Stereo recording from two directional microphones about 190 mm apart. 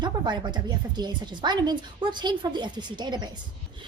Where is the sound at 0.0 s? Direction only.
25° right (ahead or behind).